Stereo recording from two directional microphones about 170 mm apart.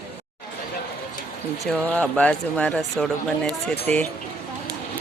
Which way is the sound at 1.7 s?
10° left (ahead or behind).